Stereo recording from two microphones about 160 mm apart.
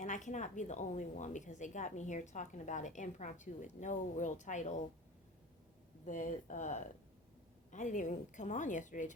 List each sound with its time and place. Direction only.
0.0 s a woman's voice: 50° left (ahead or behind)
6.1 s a woman's voice: 55° left (ahead or behind)